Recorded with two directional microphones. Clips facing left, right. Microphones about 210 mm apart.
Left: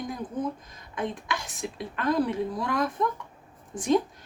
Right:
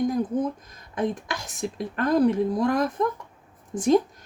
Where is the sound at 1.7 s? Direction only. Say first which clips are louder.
Right 3 dB; 45° right (ahead or behind).